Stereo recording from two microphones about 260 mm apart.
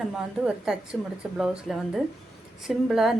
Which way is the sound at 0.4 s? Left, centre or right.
Centre.